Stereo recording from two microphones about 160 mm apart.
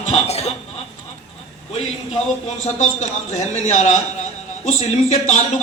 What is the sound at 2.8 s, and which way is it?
A man's voice, 50° left (ahead or behind).